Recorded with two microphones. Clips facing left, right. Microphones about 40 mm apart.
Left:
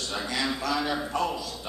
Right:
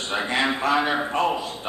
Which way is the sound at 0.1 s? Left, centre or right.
Right.